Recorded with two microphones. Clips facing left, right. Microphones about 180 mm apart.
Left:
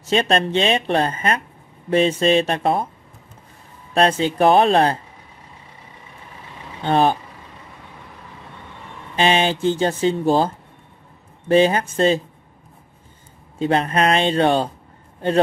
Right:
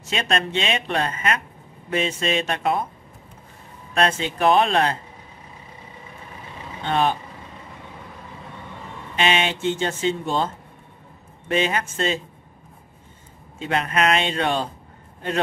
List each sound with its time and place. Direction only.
0.1 s speech: 35° left (ahead or behind)
3.9 s speech: 30° left (ahead or behind)
6.8 s speech: 35° left (ahead or behind)
9.1 s speech: 30° left (ahead or behind)
13.6 s speech: 30° left (ahead or behind)